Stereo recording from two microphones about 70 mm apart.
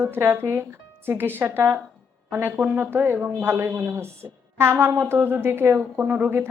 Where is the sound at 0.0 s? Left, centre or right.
Right.